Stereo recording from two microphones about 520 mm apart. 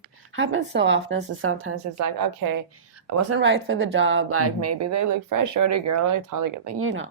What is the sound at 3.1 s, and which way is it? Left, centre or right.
Speech, right.